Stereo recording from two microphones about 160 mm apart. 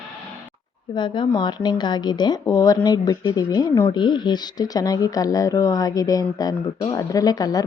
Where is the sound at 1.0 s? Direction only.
30° left (ahead or behind).